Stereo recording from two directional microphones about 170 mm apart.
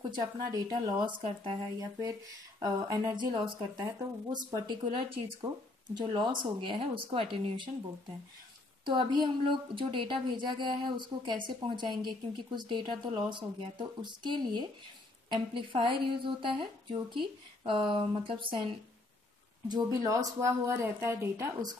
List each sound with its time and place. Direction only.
0.1 s a woman's voice: 25° right (ahead or behind)
2.0 s a woman's voice: 20° right (ahead or behind)
8.8 s a woman's voice: 30° right (ahead or behind)